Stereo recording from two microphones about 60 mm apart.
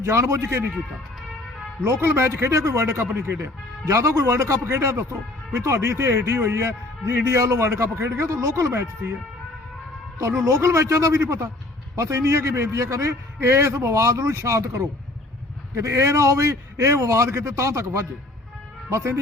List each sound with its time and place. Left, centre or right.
0.0 s speech: right
1.8 s speech: right
10.4 s speech: right
13.7 s speech: right